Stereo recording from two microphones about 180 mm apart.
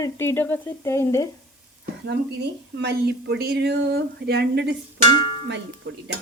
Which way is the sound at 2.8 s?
70° right (ahead or behind).